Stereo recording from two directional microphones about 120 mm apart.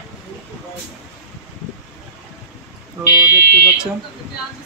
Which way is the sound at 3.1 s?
20° right (ahead or behind).